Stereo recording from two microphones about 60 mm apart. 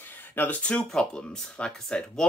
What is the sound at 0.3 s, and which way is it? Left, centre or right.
Speech, left.